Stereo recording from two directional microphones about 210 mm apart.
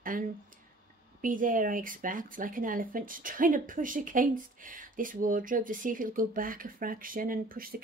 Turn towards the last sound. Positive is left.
turn(degrees=-45)  # may be behind; listen again after turning